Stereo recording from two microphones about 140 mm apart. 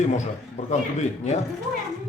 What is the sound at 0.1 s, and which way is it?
Speech, 55° left (ahead or behind).